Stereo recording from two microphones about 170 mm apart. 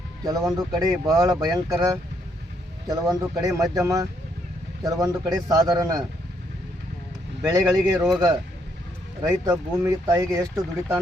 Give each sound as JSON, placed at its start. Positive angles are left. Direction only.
{"t": 0.3, "sound": "speech", "side_deg": -20}
{"t": 7.4, "sound": "speech", "side_deg": -20}
{"t": 9.5, "sound": "speech", "side_deg": -15}